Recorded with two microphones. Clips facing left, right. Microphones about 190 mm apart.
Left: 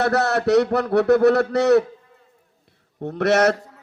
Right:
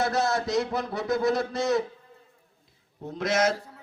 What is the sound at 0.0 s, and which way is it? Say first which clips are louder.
A man's voice: left 6 dB; 70° left (ahead or behind).